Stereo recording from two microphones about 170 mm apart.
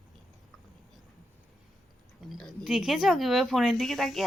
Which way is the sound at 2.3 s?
5° left (ahead or behind).